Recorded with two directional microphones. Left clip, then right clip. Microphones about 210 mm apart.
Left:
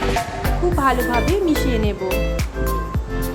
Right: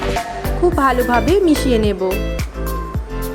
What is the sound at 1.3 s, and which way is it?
Speech, 25° right (ahead or behind).